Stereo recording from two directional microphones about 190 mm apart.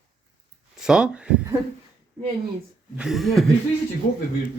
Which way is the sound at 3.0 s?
Centre (ahead or behind).